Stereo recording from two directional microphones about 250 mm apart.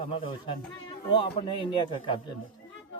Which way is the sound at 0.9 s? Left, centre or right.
Centre.